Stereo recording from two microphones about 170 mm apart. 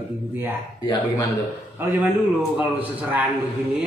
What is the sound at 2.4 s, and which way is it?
Speech, 10° right (ahead or behind).